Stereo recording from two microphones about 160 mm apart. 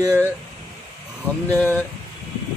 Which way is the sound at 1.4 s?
10° left (ahead or behind).